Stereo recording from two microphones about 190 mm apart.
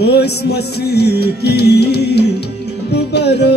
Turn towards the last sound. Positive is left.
turn(degrees=60)  # may be behind; listen again after turning